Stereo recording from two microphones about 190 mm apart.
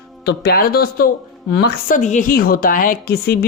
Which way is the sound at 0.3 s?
55° left (ahead or behind).